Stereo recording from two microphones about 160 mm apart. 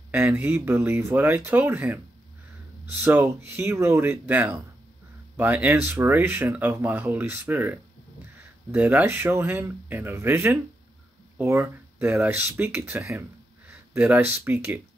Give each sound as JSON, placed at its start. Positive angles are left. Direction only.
{"t": 0.1, "sound": "speech", "side_deg": -10}